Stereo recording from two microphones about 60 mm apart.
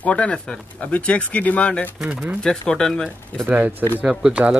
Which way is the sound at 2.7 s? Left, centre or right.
Centre.